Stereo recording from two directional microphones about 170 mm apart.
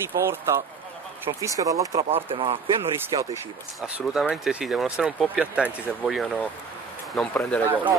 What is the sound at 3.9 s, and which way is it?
Speech, 5° right (ahead or behind).